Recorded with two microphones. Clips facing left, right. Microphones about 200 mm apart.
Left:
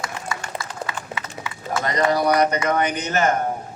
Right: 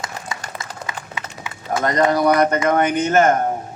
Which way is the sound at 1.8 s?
50° right (ahead or behind).